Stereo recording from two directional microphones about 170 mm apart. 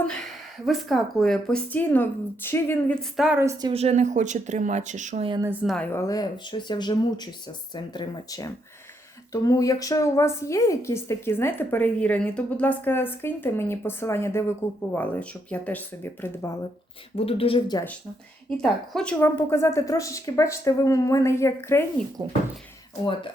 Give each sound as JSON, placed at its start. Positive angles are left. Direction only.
{"t": 0.0, "sound": "a woman's voice", "side_deg": 5}
{"t": 3.2, "sound": "a woman's voice", "side_deg": -5}
{"t": 3.7, "sound": "a woman's voice", "side_deg": -40}
{"t": 5.6, "sound": "a woman's voice", "side_deg": 5}
{"t": 17.2, "sound": "a woman's voice", "side_deg": 35}
{"t": 18.5, "sound": "a woman's voice", "side_deg": 5}
{"t": 22.2, "sound": "speech", "side_deg": -25}